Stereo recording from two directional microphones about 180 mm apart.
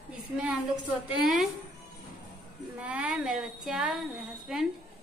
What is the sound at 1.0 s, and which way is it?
Speech, centre (ahead or behind).